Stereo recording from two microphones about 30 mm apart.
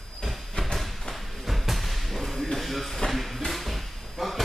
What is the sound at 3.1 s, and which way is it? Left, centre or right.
Music, centre.